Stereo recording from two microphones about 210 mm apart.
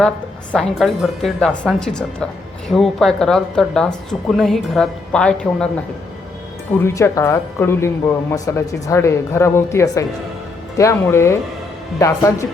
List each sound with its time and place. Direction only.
0.5 s a woman's voice: centre (ahead or behind)
6.7 s speech: 10° left (ahead or behind)